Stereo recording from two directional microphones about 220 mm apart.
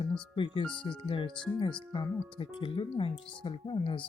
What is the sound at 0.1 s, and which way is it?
Speech, 20° left (ahead or behind).